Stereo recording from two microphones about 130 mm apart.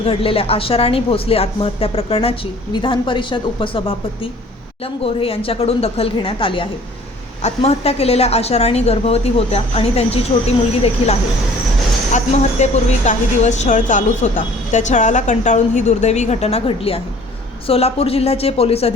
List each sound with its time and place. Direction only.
0.0 s a woman's voice: 45° left (ahead or behind)
7.4 s a woman's voice: 50° left (ahead or behind)